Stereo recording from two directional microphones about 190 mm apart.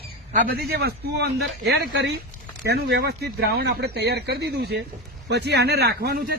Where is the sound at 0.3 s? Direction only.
50° right (ahead or behind).